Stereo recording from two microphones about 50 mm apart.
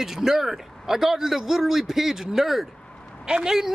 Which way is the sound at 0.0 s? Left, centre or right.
Centre.